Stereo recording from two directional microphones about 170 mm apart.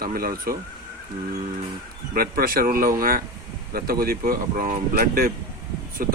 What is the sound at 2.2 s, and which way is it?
Speech, 60° right (ahead or behind).